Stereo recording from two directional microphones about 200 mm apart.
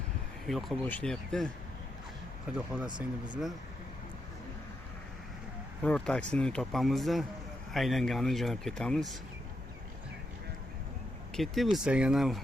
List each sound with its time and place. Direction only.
0.4 s speech: 5° left (ahead or behind)
2.8 s speech: 20° right (ahead or behind)
5.8 s speech: 5° left (ahead or behind)
11.3 s speech: centre (ahead or behind)